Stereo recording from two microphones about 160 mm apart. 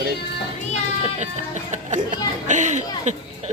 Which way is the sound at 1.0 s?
45° right (ahead or behind).